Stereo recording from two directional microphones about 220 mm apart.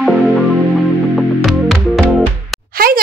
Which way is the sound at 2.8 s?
40° right (ahead or behind).